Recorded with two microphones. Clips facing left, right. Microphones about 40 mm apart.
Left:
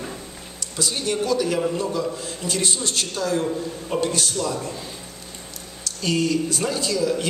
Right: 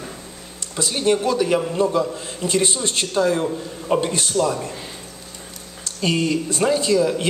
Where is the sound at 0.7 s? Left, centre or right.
Right.